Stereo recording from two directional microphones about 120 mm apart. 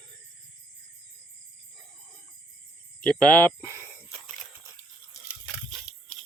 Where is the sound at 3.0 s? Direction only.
10° left (ahead or behind).